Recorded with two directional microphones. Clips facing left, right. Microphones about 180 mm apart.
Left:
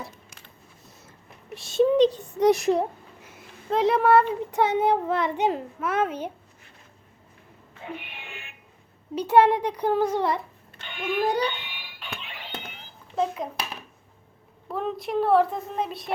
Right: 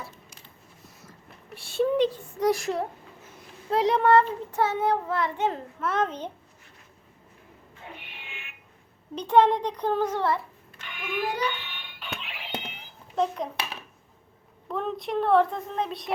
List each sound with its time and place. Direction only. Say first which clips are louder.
1.6 s a child's voice: left 4 dB; 20° left (ahead or behind)
3.7 s child singing: left 1 dB; centre (ahead or behind)
8.3 s fire alarm: left 3 dB; 40° left (ahead or behind)
9.1 s child singing: left 2 dB; 10° left (ahead or behind)
10.8 s a child's voice: left 5 dB; 30° left (ahead or behind)
11.5 s music: even; 15° left (ahead or behind); by 12.6 s 5° right (ahead or behind)
13.1 s speech: even; 5° left (ahead or behind)
14.7 s speech: left 1 dB; 5° left (ahead or behind)